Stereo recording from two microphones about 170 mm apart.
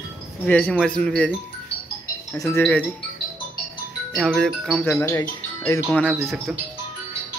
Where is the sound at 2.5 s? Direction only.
10° left (ahead or behind).